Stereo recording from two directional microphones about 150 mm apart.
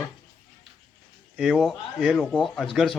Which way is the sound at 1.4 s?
Centre (ahead or behind).